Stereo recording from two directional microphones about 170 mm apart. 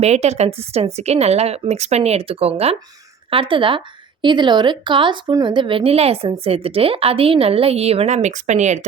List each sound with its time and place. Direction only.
0.0 s a woman's voice: 40° right (ahead or behind)